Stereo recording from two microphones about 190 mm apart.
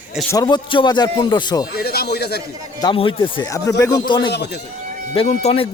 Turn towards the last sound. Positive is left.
turn(degrees=30)  # may be behind; listen again after turning